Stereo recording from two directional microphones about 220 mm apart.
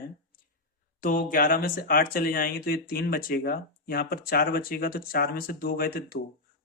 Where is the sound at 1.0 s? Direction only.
40° left (ahead or behind).